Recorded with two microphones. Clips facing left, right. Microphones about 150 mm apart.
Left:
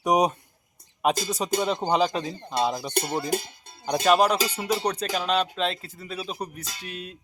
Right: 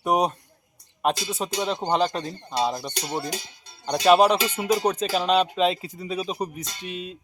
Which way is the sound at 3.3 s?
55° left (ahead or behind).